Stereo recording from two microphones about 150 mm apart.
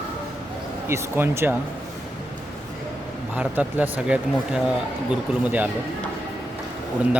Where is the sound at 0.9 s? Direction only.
15° right (ahead or behind).